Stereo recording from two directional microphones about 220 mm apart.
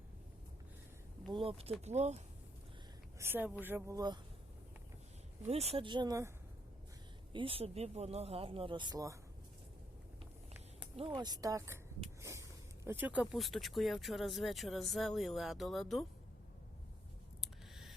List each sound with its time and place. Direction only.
1.3 s speech: 25° right (ahead or behind)
3.2 s a woman's voice: 10° right (ahead or behind)
5.5 s speech: 30° right (ahead or behind)
7.3 s speech: 25° right (ahead or behind)
10.9 s a woman's voice: 25° right (ahead or behind); by 16.0 s centre (ahead or behind)
17.4 s a sound: centre (ahead or behind)